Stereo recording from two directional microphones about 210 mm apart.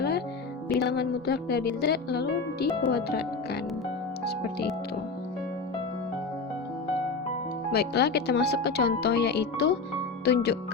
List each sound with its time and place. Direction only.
0.8 s speech: 50° left (ahead or behind)
7.7 s speech: 50° left (ahead or behind)